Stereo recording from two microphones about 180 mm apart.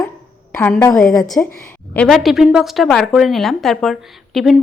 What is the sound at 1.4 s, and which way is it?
A woman's voice, 10° left (ahead or behind).